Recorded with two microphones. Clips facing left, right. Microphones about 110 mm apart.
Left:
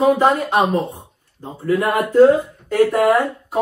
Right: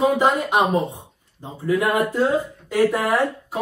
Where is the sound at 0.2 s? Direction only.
15° right (ahead or behind).